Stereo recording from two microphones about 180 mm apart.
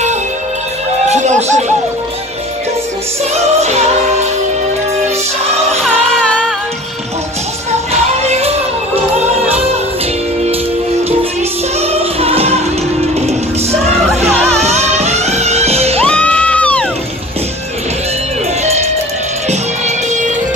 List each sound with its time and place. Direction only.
1.0 s a sound: 40° right (ahead or behind)
3.6 s music: 35° right (ahead or behind)
6.1 s music: 5° left (ahead or behind)
7.9 s music: 35° right (ahead or behind)
11.8 s music: 35° right (ahead or behind)
14.6 s music: 35° right (ahead or behind)
16.0 s music: 5° left (ahead or behind)
20.1 s music: 40° right (ahead or behind)